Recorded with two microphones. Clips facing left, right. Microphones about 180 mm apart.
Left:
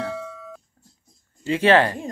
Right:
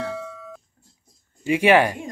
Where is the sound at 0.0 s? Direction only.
Centre (ahead or behind).